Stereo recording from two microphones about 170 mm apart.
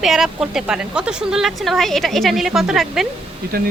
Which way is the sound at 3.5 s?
60° right (ahead or behind).